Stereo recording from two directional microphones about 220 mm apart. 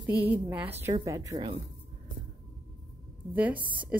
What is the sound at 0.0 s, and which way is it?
A woman's voice, 10° right (ahead or behind).